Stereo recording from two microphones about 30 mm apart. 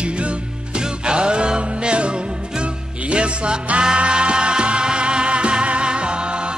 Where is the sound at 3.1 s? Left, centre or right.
Right.